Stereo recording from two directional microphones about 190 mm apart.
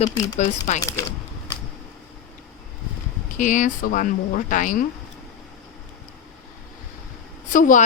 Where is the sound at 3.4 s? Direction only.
40° left (ahead or behind).